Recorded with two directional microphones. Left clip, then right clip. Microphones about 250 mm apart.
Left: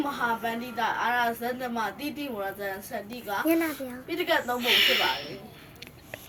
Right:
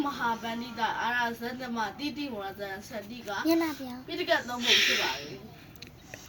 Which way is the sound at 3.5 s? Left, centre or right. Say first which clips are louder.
Even; right.